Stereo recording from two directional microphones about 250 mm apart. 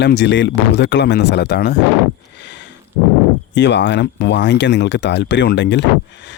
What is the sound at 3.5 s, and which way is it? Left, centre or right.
Speech, left.